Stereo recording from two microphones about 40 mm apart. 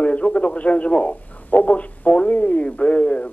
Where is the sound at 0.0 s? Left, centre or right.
Left.